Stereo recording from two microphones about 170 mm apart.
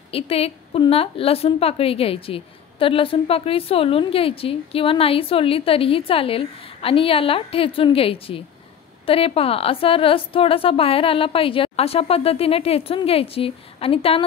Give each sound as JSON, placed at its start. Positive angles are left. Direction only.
{"t": 0.1, "sound": "a woman's voice", "side_deg": 35}